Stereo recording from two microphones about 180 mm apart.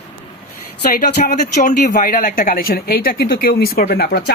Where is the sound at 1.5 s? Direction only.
45° left (ahead or behind); by 4.3 s 60° left (ahead or behind).